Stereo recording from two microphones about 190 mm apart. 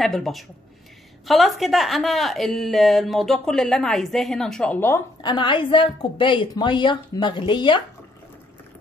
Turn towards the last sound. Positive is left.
turn(degrees=25)  # may be behind; listen again after turning